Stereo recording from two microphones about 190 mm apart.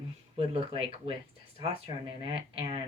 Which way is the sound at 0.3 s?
30° right (ahead or behind).